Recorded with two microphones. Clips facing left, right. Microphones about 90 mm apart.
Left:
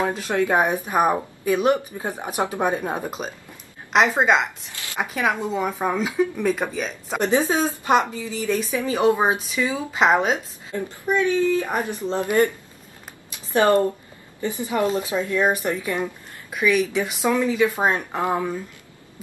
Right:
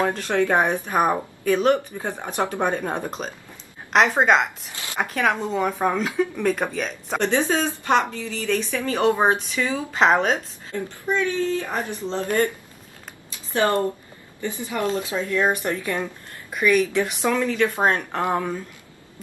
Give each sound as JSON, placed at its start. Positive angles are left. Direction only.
{"t": 0.0, "sound": "speech", "side_deg": 5}
{"t": 7.3, "sound": "speech", "side_deg": 20}
{"t": 13.5, "sound": "speech", "side_deg": 20}
{"t": 15.1, "sound": "speech", "side_deg": 10}